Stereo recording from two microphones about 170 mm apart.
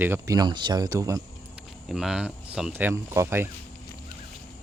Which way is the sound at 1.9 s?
5° right (ahead or behind).